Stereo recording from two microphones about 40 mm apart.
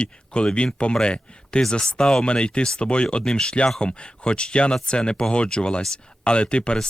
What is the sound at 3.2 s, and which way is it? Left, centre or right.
Speech, centre.